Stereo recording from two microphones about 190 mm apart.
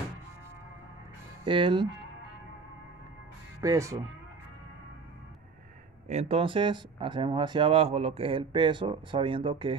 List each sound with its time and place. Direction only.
1.4 s speech: 25° right (ahead or behind)
3.6 s speech: 15° right (ahead or behind)
6.0 s speech: 35° right (ahead or behind)